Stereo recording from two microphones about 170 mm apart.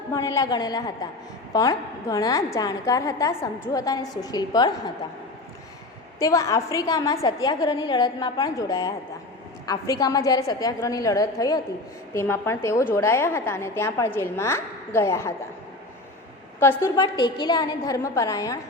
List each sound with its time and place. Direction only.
0.1 s a woman's voice: 20° left (ahead or behind)
6.1 s a woman's voice: 20° left (ahead or behind)
16.6 s a woman's voice: 15° left (ahead or behind)
17.0 s a woman's voice: 25° left (ahead or behind)